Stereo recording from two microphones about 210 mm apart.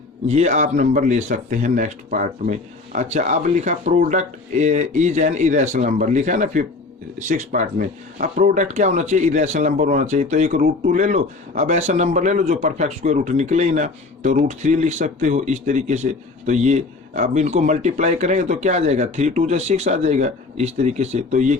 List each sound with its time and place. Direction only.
0.3 s speech: 30° right (ahead or behind)